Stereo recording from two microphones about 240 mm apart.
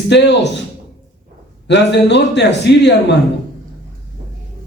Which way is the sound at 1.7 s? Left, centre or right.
Left.